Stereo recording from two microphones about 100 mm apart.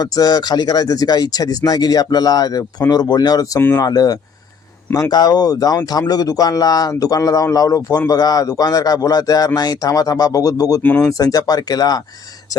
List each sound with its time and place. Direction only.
0.0 s speech: 40° left (ahead or behind)
10.8 s speech: 10° left (ahead or behind)
11.1 s speech: 40° left (ahead or behind)